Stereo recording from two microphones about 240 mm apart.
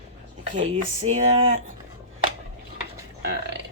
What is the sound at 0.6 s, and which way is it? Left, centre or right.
Speech, right.